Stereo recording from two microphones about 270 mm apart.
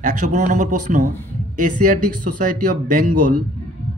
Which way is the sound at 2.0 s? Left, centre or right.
Right.